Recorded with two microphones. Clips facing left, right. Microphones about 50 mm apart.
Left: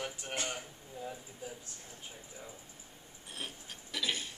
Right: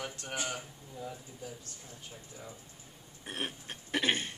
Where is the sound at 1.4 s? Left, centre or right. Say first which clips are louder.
Even; centre.